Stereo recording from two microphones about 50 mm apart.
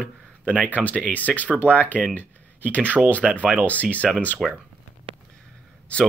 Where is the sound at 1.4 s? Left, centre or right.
Right.